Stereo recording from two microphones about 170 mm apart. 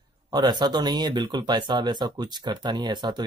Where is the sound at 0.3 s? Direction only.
25° right (ahead or behind).